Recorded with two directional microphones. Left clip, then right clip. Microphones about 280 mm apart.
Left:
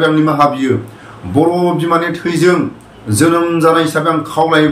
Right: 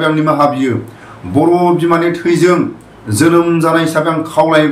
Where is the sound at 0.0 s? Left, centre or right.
Centre.